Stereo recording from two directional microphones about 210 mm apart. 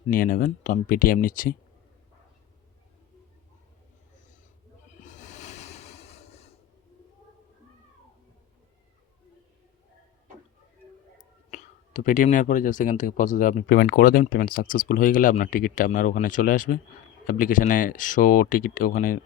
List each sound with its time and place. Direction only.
0.1 s speech: 40° left (ahead or behind)
4.9 s a sound: 35° left (ahead or behind)
11.5 s speech: 35° left (ahead or behind)